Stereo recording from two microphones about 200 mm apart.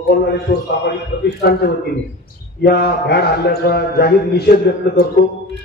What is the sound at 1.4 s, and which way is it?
A man's voice, 55° left (ahead or behind).